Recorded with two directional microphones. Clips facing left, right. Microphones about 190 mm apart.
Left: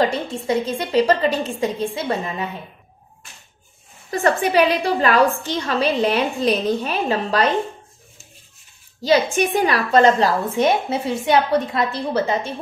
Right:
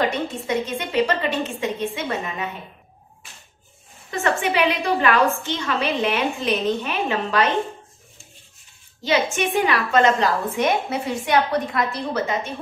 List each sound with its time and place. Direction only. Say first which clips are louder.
0.3 s a woman's voice: left 3 dB; 30° left (ahead or behind)
4.1 s a woman's voice: left 4 dB; 35° left (ahead or behind)
9.0 s a woman's voice: left 4 dB; 35° left (ahead or behind)